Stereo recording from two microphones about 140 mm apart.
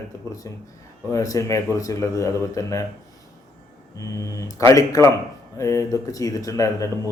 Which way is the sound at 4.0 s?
25° left (ahead or behind).